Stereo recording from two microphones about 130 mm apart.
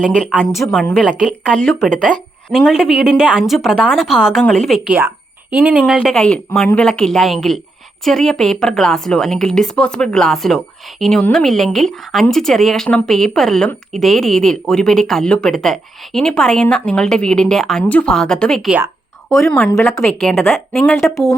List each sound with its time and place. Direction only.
0.0 s a woman's voice: 5° left (ahead or behind)
2.1 s a woman's voice: 40° left (ahead or behind)
2.5 s a woman's voice: 5° right (ahead or behind)
4.9 s speech: 10° right (ahead or behind)
6.0 s a woman's voice: 10° left (ahead or behind)
19.7 s a woman's voice: 25° left (ahead or behind)
20.0 s a woman's voice: 5° left (ahead or behind)